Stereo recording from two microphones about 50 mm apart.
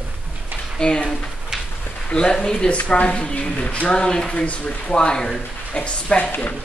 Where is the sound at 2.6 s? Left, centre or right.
Left.